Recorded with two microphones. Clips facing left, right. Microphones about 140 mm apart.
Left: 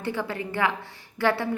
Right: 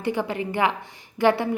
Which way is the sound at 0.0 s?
15° right (ahead or behind).